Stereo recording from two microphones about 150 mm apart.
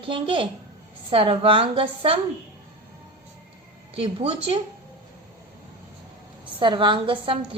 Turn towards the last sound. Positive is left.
turn(degrees=-35)  # may be behind; listen again after turning